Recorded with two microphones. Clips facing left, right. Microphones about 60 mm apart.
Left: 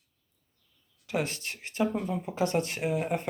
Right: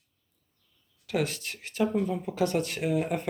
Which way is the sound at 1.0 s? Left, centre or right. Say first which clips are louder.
Right 2 dB; centre.